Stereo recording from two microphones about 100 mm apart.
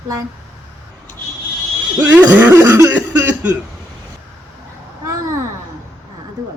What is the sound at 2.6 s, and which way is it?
Cough, 30° right (ahead or behind).